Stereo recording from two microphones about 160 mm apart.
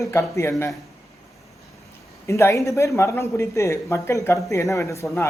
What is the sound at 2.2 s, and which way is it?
A man's voice, 20° left (ahead or behind).